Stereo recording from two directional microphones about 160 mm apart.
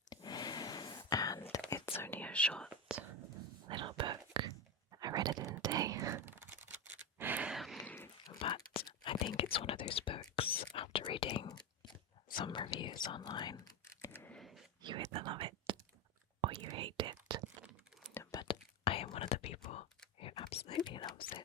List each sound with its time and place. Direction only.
0.1 s whispering: 25° left (ahead or behind); by 2.6 s 5° left (ahead or behind)
2.9 s whispering: 5° right (ahead or behind)
3.7 s whispering: 30° right (ahead or behind)
4.9 s chewing: 25° right (ahead or behind)
5.6 s whispering: 25° right (ahead or behind)
7.2 s a sound: 10° right (ahead or behind)
7.9 s dog: 15° left (ahead or behind)
8.3 s whispering: 25° left (ahead or behind)
13.1 s computer keyboard: 30° left (ahead or behind); by 14.4 s 10° left (ahead or behind)
14.8 s whispering: 30° right (ahead or behind)
18.1 s whispering: 20° left (ahead or behind); by 19.9 s 40° left (ahead or behind)
20.1 s whispering: 30° left (ahead or behind)